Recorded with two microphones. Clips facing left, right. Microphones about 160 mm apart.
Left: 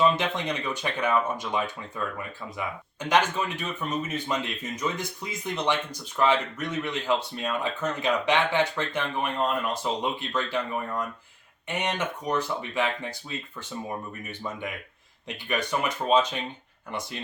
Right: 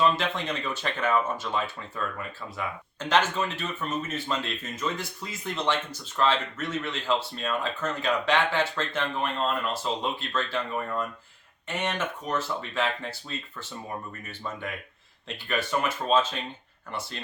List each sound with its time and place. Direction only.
0.2 s speech: 15° left (ahead or behind)